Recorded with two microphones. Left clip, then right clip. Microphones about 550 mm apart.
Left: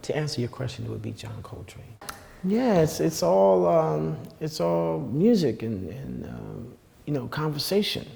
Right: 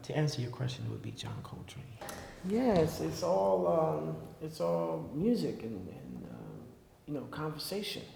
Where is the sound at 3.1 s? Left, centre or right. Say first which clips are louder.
Left 10 dB; left.